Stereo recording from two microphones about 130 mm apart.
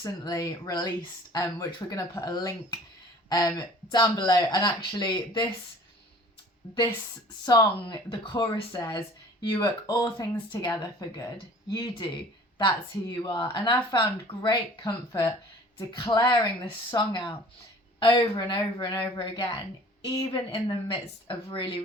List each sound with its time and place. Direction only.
0.0 s speech: 25° left (ahead or behind)
7.4 s speech: 35° left (ahead or behind)